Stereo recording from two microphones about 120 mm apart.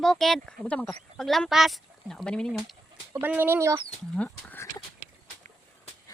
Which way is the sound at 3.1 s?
15° right (ahead or behind).